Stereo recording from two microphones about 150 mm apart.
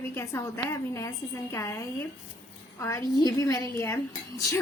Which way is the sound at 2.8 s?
20° left (ahead or behind).